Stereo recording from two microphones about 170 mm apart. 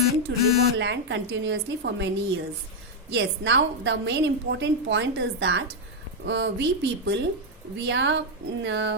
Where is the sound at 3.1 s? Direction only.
90° right.